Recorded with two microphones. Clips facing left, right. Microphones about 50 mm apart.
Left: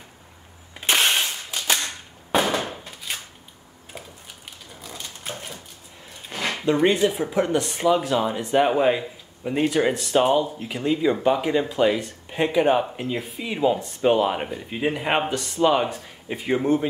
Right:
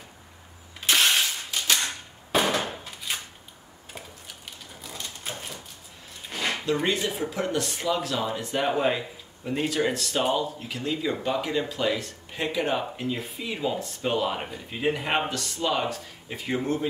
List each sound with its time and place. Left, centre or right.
0.7 s cap gun: left
2.6 s a sound: centre
6.4 s speech: left